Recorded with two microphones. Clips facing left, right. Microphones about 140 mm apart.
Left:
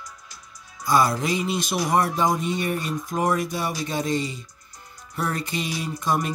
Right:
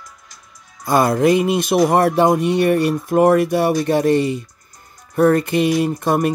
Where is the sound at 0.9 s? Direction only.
55° right (ahead or behind).